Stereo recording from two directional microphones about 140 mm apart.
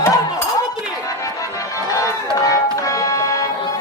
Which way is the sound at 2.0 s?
25° left (ahead or behind).